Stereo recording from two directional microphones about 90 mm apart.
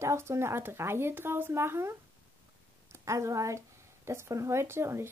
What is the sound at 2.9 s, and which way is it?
A woman's voice, 35° right (ahead or behind).